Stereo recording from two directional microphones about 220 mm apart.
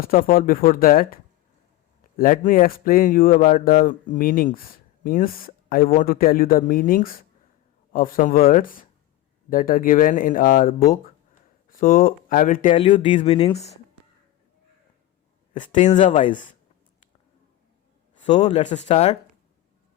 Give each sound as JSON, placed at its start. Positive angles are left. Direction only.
{"t": 0.0, "sound": "speech", "side_deg": 40}
{"t": 12.7, "sound": "speech", "side_deg": 25}
{"t": 15.5, "sound": "speech", "side_deg": 35}
{"t": 18.3, "sound": "speech", "side_deg": 30}